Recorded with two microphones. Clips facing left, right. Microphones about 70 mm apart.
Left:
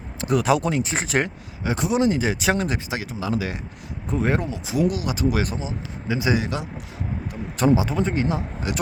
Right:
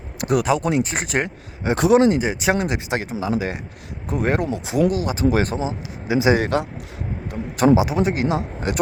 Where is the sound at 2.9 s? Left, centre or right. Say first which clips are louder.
Right 4 dB; right.